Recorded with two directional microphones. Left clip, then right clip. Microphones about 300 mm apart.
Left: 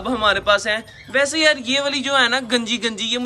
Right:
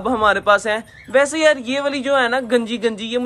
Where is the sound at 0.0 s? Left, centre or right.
Centre.